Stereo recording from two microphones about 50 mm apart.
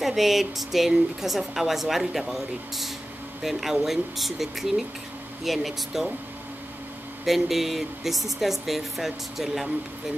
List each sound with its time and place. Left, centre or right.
0.0 s a woman's voice: centre
7.2 s a woman's voice: centre